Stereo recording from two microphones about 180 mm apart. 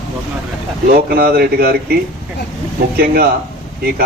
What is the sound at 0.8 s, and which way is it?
Speech, 55° right (ahead or behind).